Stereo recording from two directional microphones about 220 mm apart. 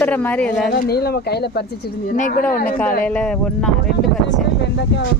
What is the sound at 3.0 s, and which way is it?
Speech, 5° left (ahead or behind).